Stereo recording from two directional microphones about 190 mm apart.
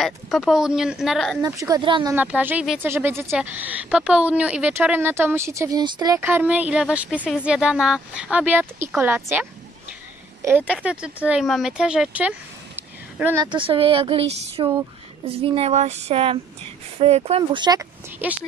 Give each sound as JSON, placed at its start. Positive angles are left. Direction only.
{"t": 0.0, "sound": "speech", "side_deg": 0}
{"t": 1.4, "sound": "speech", "side_deg": -20}
{"t": 2.1, "sound": "speech", "side_deg": -10}
{"t": 13.5, "sound": "speech", "side_deg": -30}